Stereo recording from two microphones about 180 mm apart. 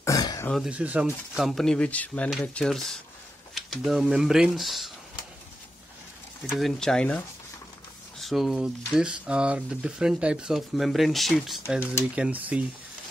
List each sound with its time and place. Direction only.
0.0 s throat clearing: 20° left (ahead or behind)
0.5 s speech: 5° right (ahead or behind)
6.5 s speech: centre (ahead or behind)
8.2 s speech: centre (ahead or behind)